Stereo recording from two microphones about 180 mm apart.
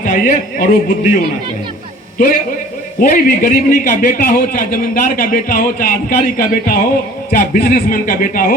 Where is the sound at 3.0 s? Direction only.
50° left (ahead or behind).